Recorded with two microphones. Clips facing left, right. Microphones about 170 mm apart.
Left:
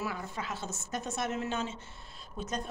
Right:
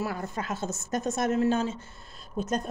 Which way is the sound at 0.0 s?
45° right (ahead or behind).